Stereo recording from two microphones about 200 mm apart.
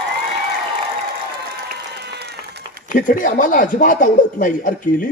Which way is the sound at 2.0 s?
55° right (ahead or behind).